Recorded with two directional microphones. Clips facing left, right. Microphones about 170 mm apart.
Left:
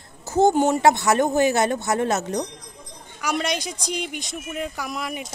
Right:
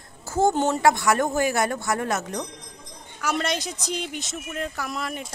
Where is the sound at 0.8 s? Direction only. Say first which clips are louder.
Left 2 dB; 25° left (ahead or behind).